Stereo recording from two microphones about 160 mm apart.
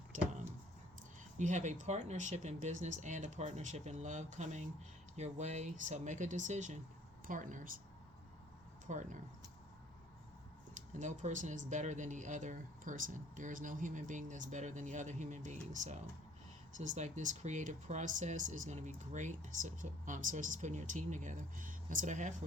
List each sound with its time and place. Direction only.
1.4 s speech: 50° right (ahead or behind)
8.9 s speech: 50° right (ahead or behind)
11.0 s speech: 50° right (ahead or behind)